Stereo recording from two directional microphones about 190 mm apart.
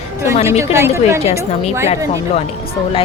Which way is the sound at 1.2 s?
35° left (ahead or behind).